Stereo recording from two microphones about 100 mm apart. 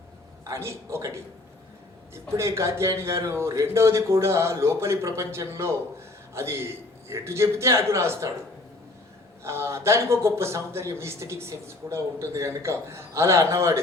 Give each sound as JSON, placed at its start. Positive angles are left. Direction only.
{"t": 0.4, "sound": "speech", "side_deg": -30}
{"t": 9.4, "sound": "speech", "side_deg": -25}